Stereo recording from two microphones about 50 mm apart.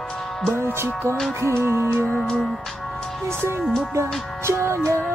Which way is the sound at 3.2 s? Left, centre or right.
Right.